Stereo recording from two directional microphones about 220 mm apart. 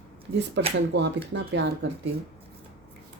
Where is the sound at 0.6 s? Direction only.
55° right (ahead or behind).